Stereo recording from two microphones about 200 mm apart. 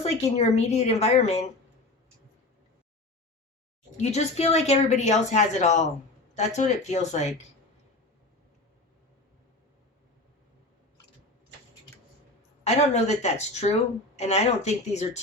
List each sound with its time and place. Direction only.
0.0 s a woman's voice: 35° left (ahead or behind)
3.9 s a woman's voice: 35° left (ahead or behind)
12.6 s a woman's voice: 35° left (ahead or behind)